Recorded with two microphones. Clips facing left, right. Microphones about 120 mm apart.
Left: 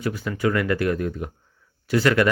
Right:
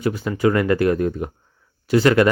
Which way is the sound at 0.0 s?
25° right (ahead or behind).